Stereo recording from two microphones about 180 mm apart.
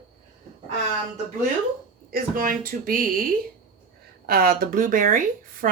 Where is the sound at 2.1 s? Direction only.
50° right (ahead or behind).